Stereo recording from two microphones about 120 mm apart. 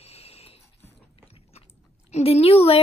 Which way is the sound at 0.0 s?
55° left (ahead or behind).